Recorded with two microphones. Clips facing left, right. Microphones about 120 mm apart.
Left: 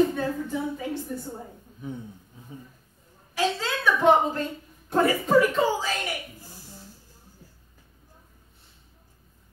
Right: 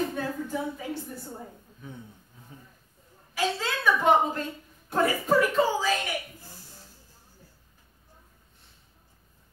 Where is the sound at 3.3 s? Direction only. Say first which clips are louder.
Left 2 dB; 5° right (ahead or behind).